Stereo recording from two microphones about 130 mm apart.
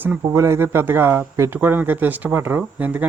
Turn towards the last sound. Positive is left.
turn(degrees=-10)  # may be behind; listen again after turning